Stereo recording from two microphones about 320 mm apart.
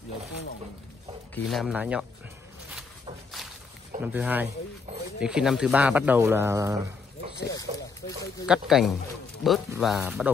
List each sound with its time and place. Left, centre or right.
1.3 s speech: centre
3.4 s walk: centre
4.0 s speech: centre
8.5 s speech: centre